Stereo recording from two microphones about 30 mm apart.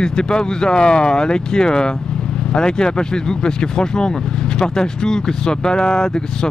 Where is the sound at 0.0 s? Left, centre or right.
Left.